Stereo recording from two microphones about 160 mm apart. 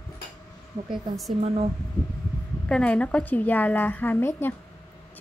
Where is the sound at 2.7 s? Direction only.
5° left (ahead or behind).